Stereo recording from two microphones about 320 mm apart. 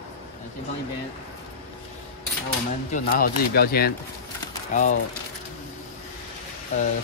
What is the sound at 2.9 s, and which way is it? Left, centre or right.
Speech, left.